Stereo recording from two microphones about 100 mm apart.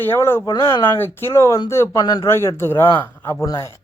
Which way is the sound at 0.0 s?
25° left (ahead or behind).